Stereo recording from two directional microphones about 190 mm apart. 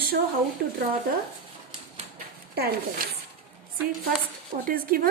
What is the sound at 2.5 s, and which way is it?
Speech, 55° right (ahead or behind).